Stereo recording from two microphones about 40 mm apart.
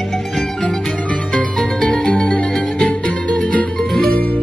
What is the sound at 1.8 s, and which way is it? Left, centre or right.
Music, left.